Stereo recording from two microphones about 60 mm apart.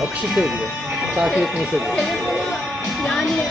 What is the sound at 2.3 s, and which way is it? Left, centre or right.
Music, centre.